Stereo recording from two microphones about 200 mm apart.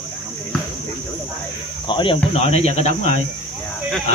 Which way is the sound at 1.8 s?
25° left (ahead or behind).